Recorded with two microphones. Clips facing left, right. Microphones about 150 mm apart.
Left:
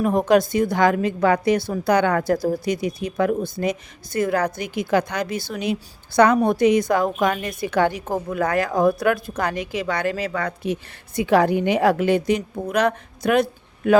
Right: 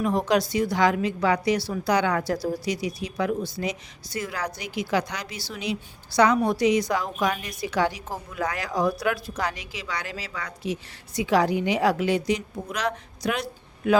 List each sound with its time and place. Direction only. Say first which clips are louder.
0.0 s a woman's voice: left 5 dB; 50° left (ahead or behind)